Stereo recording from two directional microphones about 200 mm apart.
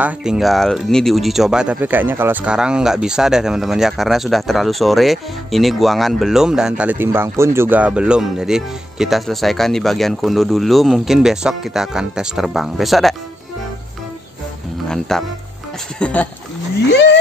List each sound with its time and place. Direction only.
0.0 s speech: 5° right (ahead or behind)
14.9 s speech: centre (ahead or behind)
16.9 s a sound: 60° left (ahead or behind)